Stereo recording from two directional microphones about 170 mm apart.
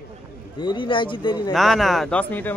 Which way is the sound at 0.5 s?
30° left (ahead or behind).